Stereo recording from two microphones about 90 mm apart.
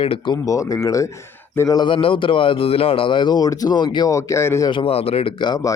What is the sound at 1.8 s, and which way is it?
A man's voice, 75° left (ahead or behind).